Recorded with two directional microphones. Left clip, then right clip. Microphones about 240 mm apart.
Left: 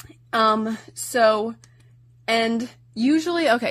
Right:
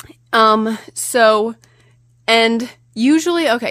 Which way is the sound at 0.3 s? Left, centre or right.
Right.